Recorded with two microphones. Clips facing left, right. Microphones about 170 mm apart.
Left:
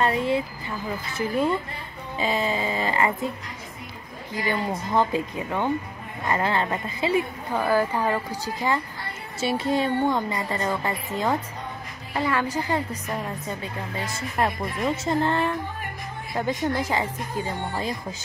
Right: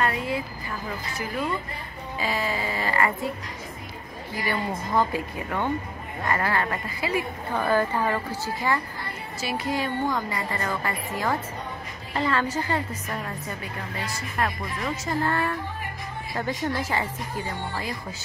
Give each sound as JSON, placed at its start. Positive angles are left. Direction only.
{"t": 0.0, "sound": "a woman's voice", "side_deg": 25}
{"t": 4.3, "sound": "a woman's voice", "side_deg": 20}
{"t": 7.5, "sound": "a woman's voice", "side_deg": 10}
{"t": 9.4, "sound": "a woman's voice", "side_deg": 25}
{"t": 12.1, "sound": "a woman's voice", "side_deg": 10}